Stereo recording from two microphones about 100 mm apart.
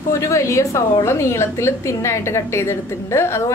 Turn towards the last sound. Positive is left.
turn(degrees=25)  # may be behind; listen again after turning